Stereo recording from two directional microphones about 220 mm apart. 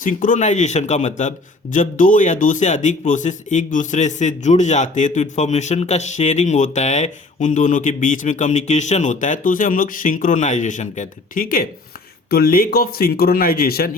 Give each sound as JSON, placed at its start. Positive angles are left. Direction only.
{"t": 0.0, "sound": "speech", "side_deg": 35}